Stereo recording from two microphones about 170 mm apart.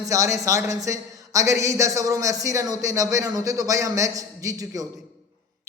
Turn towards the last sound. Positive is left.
turn(degrees=-20)  # may be behind; listen again after turning